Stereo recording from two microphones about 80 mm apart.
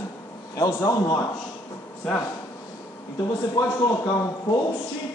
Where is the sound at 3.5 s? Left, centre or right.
Left.